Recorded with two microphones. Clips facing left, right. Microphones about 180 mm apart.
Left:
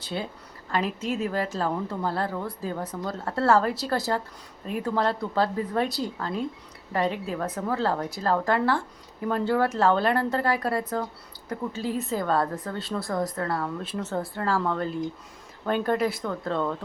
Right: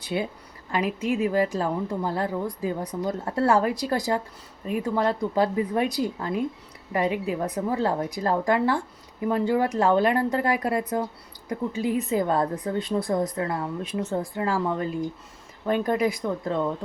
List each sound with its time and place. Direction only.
0.7 s speech: 10° right (ahead or behind)